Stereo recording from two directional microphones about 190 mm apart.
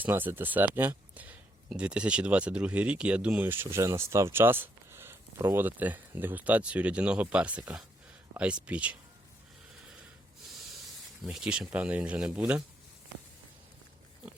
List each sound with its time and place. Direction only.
0.0 s speech: 10° right (ahead or behind)
11.2 s speech: 5° right (ahead or behind)